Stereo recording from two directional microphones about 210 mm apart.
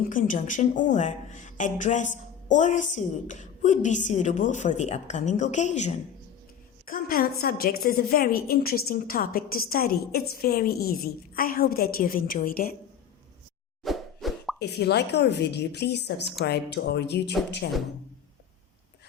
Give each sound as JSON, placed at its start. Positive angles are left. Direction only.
{"t": 0.1, "sound": "a woman's voice", "side_deg": 40}
{"t": 13.8, "sound": "plop", "side_deg": 0}
{"t": 14.6, "sound": "a woman's voice", "side_deg": 50}